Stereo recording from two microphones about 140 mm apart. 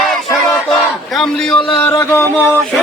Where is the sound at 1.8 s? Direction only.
20° left (ahead or behind).